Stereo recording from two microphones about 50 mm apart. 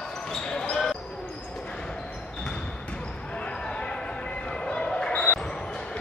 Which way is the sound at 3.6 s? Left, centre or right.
Centre.